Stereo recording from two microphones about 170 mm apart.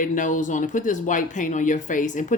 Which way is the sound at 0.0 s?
50° left (ahead or behind).